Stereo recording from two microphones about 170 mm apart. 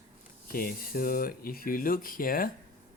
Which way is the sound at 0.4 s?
55° left (ahead or behind).